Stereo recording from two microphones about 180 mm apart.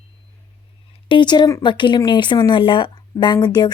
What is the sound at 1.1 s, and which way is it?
Speech, 25° left (ahead or behind).